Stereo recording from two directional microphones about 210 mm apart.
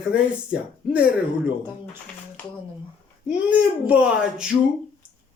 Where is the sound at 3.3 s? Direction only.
5° right (ahead or behind).